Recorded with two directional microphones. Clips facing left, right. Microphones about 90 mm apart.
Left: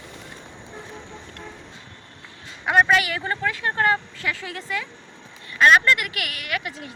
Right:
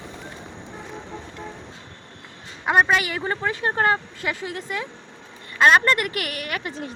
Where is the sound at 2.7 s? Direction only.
25° right (ahead or behind).